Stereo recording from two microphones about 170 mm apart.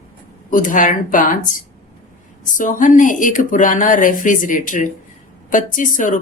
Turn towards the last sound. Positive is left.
turn(degrees=50)  # may be behind; listen again after turning